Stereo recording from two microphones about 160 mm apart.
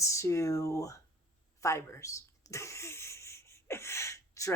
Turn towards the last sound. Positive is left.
turn(degrees=20)  # may be behind; listen again after turning